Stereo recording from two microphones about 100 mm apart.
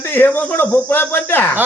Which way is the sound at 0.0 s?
20° left (ahead or behind).